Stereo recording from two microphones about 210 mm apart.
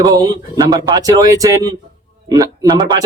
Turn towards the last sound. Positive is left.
turn(degrees=-15)  # may be behind; listen again after turning